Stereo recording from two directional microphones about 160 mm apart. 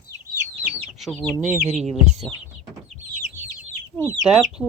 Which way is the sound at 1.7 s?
45° right (ahead or behind).